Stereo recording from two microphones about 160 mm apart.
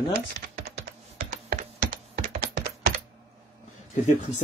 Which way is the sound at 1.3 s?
50° right (ahead or behind).